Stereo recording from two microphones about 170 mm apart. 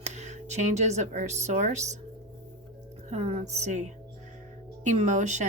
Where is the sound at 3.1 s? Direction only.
40° right (ahead or behind).